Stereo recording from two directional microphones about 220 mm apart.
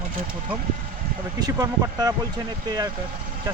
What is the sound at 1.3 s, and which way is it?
Speech, 15° right (ahead or behind).